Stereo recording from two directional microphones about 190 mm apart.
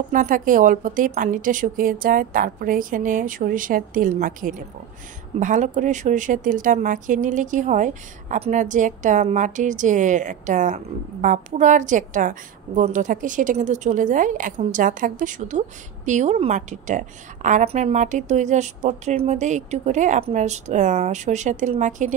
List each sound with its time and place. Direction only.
0.1 s a woman's voice: 45° right (ahead or behind)